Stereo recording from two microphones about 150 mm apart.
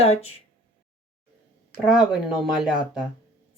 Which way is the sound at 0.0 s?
40° left (ahead or behind).